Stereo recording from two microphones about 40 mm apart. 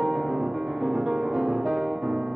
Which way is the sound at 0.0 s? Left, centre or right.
Centre.